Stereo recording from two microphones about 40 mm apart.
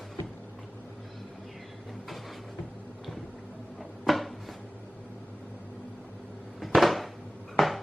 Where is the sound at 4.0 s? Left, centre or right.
Centre.